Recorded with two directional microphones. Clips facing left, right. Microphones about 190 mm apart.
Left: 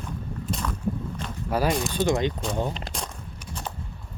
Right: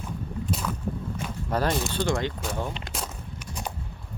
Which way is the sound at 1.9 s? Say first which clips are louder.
Left 3 dB; 20° left (ahead or behind).